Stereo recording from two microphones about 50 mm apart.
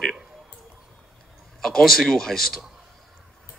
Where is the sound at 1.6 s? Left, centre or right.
Centre.